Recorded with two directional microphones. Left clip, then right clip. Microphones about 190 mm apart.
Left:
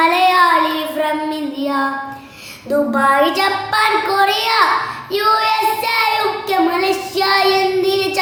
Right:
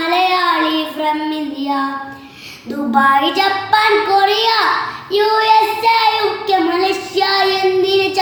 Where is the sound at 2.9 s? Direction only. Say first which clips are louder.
Right 3 dB; 25° left (ahead or behind).